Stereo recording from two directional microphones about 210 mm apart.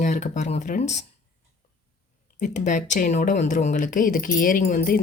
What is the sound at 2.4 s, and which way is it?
Speech, 35° left (ahead or behind).